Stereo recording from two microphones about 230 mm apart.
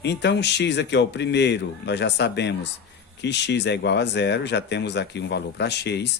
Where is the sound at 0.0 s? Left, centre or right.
Left.